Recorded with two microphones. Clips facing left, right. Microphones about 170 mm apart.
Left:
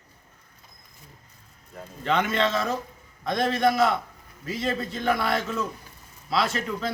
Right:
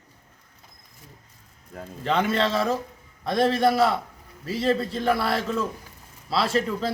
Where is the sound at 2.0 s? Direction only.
35° right (ahead or behind).